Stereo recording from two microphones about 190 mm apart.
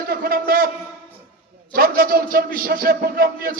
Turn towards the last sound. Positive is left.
turn(degrees=-50)  # may be behind; listen again after turning